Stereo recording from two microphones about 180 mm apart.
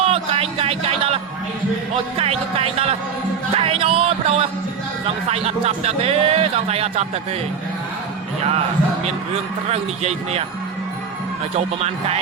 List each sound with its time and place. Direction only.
0.0 s a man's voice: 35° right (ahead or behind)
9.7 s a man's voice: 35° right (ahead or behind)
11.5 s a man's voice: 35° right (ahead or behind)